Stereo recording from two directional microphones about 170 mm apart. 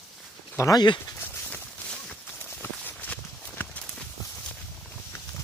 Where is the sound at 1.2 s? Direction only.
10° left (ahead or behind).